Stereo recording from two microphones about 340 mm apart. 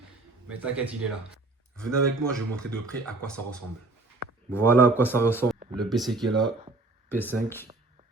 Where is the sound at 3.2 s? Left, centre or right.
Centre.